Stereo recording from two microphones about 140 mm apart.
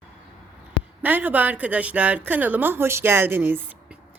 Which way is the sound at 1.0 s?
10° right (ahead or behind).